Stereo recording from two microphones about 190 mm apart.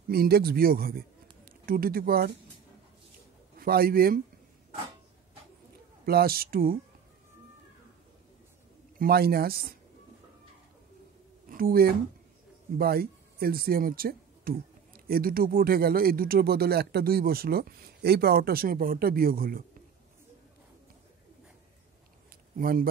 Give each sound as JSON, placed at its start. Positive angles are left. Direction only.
{"t": 0.1, "sound": "speech", "side_deg": -55}
{"t": 3.5, "sound": "speech", "side_deg": -50}
{"t": 6.0, "sound": "speech", "side_deg": -55}
{"t": 8.9, "sound": "speech", "side_deg": -50}
{"t": 11.4, "sound": "speech", "side_deg": -50}
{"t": 22.6, "sound": "speech", "side_deg": -50}